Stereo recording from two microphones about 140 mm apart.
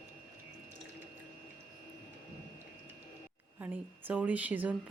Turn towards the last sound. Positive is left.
turn(degrees=-10)  # may be behind; listen again after turning